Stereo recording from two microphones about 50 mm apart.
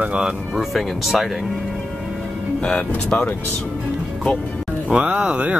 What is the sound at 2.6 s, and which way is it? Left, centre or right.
Speech, centre.